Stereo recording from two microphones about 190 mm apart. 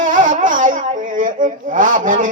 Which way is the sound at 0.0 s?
45° right (ahead or behind).